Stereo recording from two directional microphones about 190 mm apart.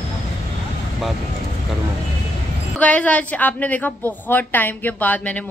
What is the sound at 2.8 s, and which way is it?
A woman's voice, 5° left (ahead or behind).